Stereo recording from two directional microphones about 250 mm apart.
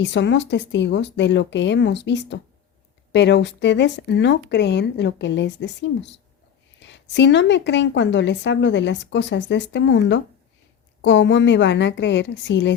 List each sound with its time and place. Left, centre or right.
0.0 s a woman's voice: left